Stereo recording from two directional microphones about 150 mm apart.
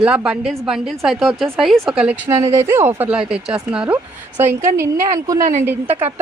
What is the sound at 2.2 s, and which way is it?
Speech, 20° right (ahead or behind).